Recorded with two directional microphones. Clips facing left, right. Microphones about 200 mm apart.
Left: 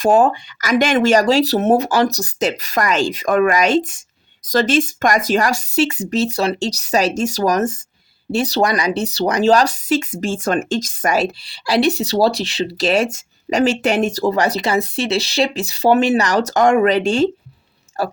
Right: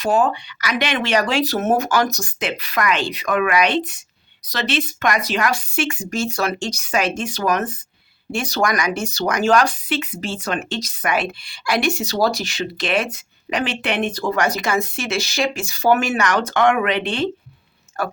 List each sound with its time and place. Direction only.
0.0 s speech: 45° left (ahead or behind)
18.0 s speech: 30° left (ahead or behind)